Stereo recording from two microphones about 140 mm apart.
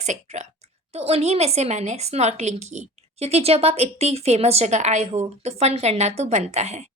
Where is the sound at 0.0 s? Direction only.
55° right (ahead or behind).